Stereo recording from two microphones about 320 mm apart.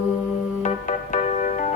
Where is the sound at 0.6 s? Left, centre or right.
Left.